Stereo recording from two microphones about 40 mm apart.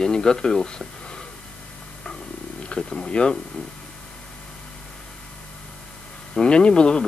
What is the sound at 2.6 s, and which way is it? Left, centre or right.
Speech, left.